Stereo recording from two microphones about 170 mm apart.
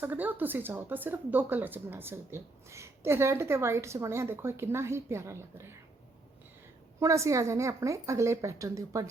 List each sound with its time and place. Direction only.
0.0 s a woman's voice: 10° right (ahead or behind)
7.0 s a woman's voice: 20° right (ahead or behind)